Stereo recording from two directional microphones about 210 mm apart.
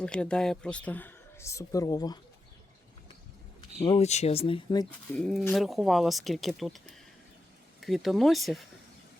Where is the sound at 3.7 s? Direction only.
25° left (ahead or behind).